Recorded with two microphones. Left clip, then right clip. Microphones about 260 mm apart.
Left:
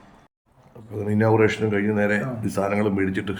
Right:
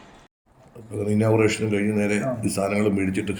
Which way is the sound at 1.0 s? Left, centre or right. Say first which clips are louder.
Left 1 dB; centre.